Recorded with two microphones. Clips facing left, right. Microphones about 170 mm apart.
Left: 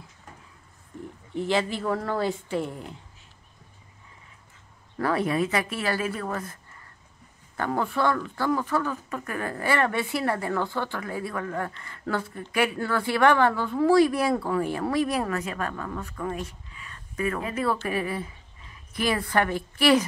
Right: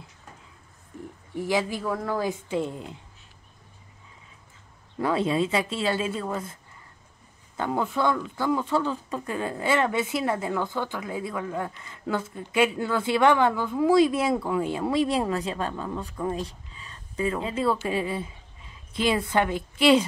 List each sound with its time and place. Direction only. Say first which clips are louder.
1.5 s speech: left 1 dB; 15° right (ahead or behind)
4.9 s speech: right 1 dB; 20° right (ahead or behind)
7.5 s speech: even; 15° right (ahead or behind)
16.3 s a sound: right 2 dB; 30° right (ahead or behind)
17.7 s speech: right 1 dB; 20° right (ahead or behind)